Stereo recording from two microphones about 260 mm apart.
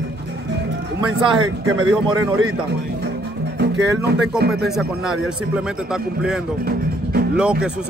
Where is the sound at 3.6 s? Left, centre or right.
Right.